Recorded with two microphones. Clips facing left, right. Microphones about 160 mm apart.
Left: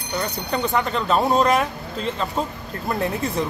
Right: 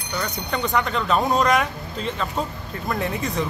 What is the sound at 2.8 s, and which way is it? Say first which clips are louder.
Speech: left 2 dB; 30° left (ahead or behind).